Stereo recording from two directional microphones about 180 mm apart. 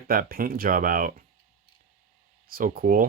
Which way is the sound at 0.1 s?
55° right (ahead or behind).